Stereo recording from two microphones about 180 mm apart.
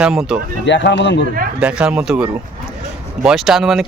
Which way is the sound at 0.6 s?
85° left.